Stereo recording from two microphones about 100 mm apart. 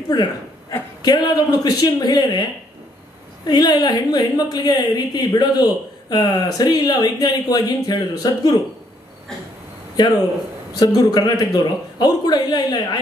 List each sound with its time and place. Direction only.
0.1 s speech: 40° left (ahead or behind)
3.4 s speech: 45° left (ahead or behind)
10.8 s a man's voice: 40° left (ahead or behind)